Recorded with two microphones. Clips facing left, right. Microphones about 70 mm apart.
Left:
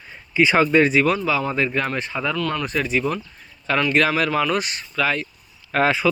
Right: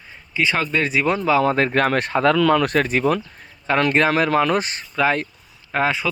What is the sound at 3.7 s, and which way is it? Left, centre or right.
Speech, right.